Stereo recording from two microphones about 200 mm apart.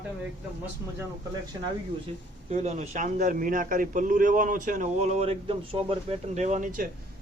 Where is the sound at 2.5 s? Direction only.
35° right (ahead or behind).